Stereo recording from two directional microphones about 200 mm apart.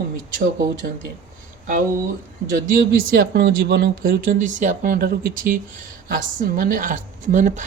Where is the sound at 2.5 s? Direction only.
45° right (ahead or behind).